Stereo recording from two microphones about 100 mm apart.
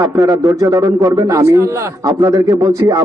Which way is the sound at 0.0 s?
30° right (ahead or behind).